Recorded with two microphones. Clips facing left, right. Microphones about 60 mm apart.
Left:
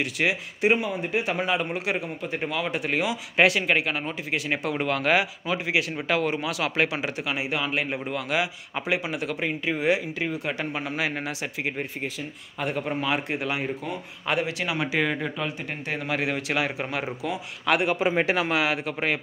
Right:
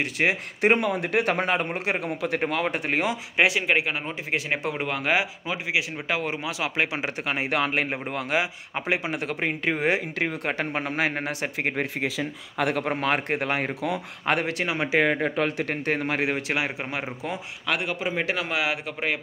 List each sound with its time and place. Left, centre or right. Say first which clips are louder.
0.0 s speech: right 1 dB; right
0.6 s speech: right 2 dB; right
2.0 s speech: right 3 dB; right
2.4 s speech: left 1 dB; right
3.3 s speech: left 1 dB; centre
7.2 s speech: right 5 dB; right
8.3 s speech: right 1 dB; right
10.1 s speech: right 2 dB; right
11.7 s speech: right 4 dB; right
14.7 s speech: right 5 dB; right
15.3 s speech: right 5 dB; right
17.8 s a man's voice: left 5 dB; left
18.2 s speech: left 3 dB; centre
18.5 s speech: left 2 dB; centre